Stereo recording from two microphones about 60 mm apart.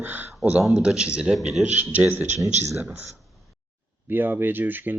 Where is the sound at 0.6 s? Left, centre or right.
Centre.